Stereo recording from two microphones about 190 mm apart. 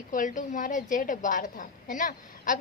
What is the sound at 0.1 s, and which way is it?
A woman's voice, 40° left (ahead or behind).